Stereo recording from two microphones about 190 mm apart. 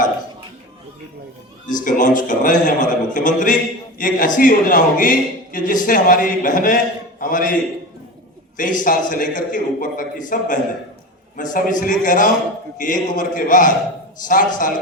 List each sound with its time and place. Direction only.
1.6 s a man's voice: 45° left (ahead or behind)